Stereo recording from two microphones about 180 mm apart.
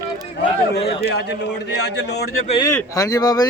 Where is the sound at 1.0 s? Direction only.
70° left (ahead or behind).